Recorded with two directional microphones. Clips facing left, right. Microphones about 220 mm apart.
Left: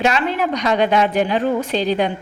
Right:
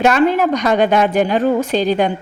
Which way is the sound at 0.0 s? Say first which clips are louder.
Right 6 dB; 50° right (ahead or behind).